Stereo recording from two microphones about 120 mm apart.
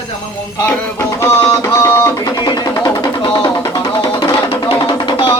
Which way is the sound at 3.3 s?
30° left (ahead or behind).